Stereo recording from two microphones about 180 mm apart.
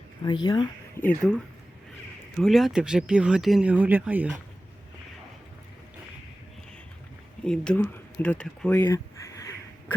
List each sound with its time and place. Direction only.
0.3 s speech: 25° left (ahead or behind)
1.0 s speech: 5° left (ahead or behind)
2.4 s speech: centre (ahead or behind)
7.4 s speech: 5° left (ahead or behind)